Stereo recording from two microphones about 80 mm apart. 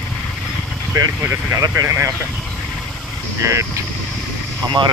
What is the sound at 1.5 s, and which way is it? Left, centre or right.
Speech, right.